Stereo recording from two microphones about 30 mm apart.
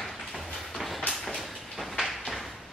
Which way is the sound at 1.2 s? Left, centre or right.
Centre.